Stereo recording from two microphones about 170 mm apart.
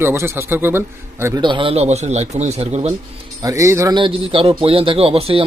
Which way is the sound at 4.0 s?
30° right (ahead or behind).